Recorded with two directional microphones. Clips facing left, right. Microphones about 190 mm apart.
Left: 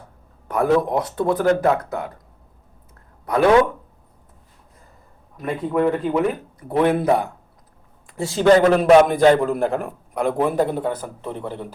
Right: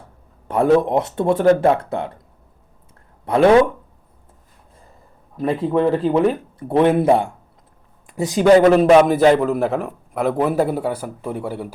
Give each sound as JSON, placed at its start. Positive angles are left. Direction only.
{"t": 0.4, "sound": "speech", "side_deg": -25}
{"t": 3.3, "sound": "speech", "side_deg": -30}
{"t": 5.4, "sound": "a man's voice", "side_deg": -30}